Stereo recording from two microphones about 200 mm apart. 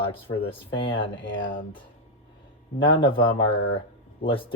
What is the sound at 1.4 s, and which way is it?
Speech, 40° left (ahead or behind).